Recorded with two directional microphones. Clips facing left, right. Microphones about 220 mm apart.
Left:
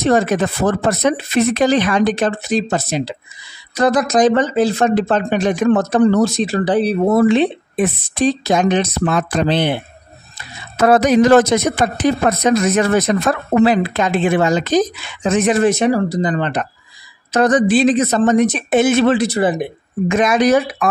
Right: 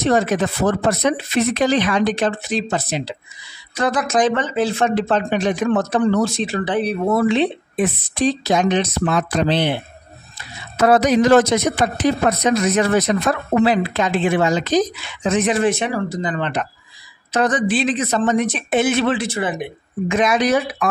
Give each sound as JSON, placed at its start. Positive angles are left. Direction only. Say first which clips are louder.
{"t": 0.0, "sound": "speech", "louder": "left 2 dB", "side_deg": 50}
{"t": 10.8, "sound": "speech", "louder": "left 3 dB", "side_deg": 50}